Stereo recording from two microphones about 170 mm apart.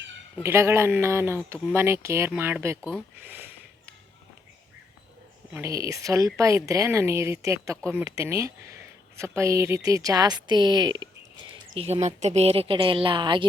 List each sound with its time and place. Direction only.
0.4 s a woman's voice: 15° right (ahead or behind)
3.2 s a sound: 10° right (ahead or behind)
5.5 s a woman's voice: 20° right (ahead or behind)
11.7 s a woman's voice: 35° right (ahead or behind)